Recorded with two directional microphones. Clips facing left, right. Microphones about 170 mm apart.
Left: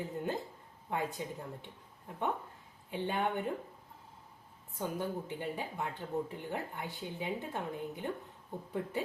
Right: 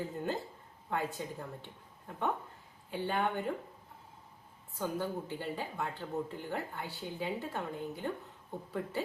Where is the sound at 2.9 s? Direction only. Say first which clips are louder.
Right 1 dB; 20° left (ahead or behind).